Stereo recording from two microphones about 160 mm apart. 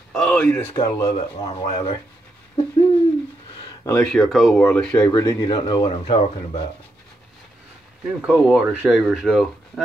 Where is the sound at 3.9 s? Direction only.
5° left (ahead or behind).